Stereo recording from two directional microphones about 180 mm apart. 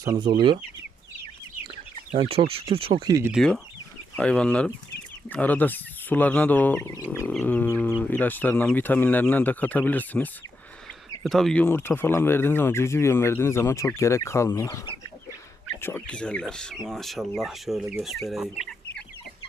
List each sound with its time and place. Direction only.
0.0 s speech: 20° right (ahead or behind)
2.1 s speech: 30° right (ahead or behind)
3.3 s speech: 5° left (ahead or behind)